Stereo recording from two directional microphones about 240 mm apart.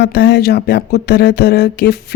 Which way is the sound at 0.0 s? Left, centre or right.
Left.